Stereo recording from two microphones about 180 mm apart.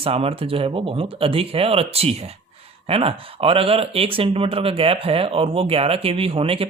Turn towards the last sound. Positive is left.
turn(degrees=-30)  # may be behind; listen again after turning